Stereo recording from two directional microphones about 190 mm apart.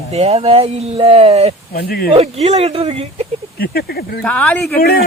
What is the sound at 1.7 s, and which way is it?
Speech, 50° left (ahead or behind).